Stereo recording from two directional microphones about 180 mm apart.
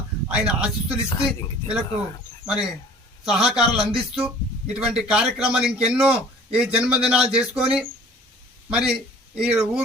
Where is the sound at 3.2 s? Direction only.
5° right (ahead or behind).